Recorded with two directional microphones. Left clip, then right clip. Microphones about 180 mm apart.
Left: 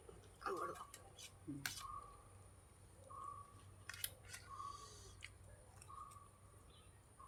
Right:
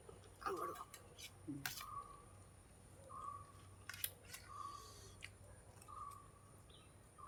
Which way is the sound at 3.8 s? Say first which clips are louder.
Even; 5° right (ahead or behind).